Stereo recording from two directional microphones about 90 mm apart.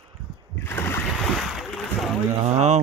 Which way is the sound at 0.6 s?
25° left (ahead or behind).